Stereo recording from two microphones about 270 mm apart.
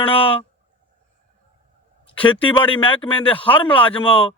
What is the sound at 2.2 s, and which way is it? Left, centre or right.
A man's voice, centre.